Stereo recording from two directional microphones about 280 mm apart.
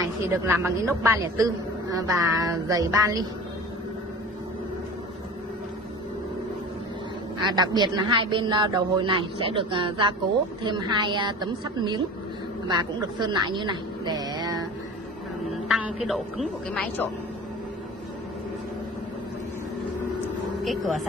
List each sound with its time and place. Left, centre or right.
0.0 s a woman's voice: centre
7.5 s a woman's voice: centre
12.6 s a woman's voice: centre
16.1 s speech: centre
20.6 s speech: centre